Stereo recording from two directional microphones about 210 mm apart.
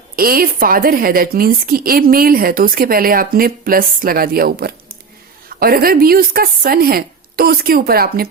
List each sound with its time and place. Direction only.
0.2 s a woman's voice: 45° right (ahead or behind)